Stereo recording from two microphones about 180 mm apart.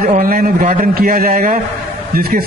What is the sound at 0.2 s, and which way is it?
A man's voice, 50° right (ahead or behind).